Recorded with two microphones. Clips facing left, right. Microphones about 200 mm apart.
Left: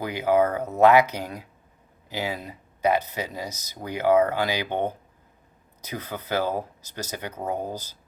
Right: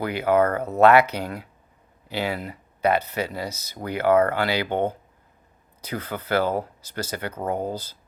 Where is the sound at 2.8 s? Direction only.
15° left (ahead or behind).